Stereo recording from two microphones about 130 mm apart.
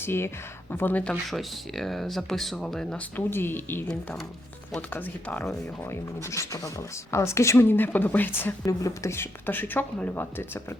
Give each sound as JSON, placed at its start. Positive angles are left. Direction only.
{"t": 0.0, "sound": "speech", "side_deg": 20}
{"t": 1.3, "sound": "speech", "side_deg": 0}
{"t": 3.8, "sound": "speech", "side_deg": 5}
{"t": 5.9, "sound": "speech", "side_deg": 20}